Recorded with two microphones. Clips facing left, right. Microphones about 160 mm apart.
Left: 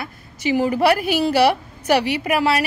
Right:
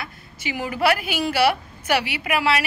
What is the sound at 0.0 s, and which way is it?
A woman's voice, 35° left (ahead or behind).